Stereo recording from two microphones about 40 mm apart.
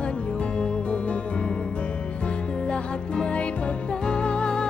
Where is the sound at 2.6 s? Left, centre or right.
Left.